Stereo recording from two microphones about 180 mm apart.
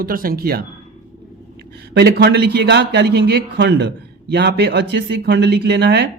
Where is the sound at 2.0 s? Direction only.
65° right (ahead or behind).